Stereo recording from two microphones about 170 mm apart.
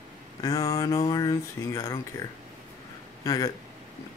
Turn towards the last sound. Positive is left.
turn(degrees=20)  # may be behind; listen again after turning